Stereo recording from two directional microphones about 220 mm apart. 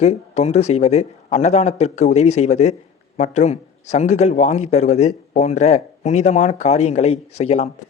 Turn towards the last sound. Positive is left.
turn(degrees=30)  # may be behind; listen again after turning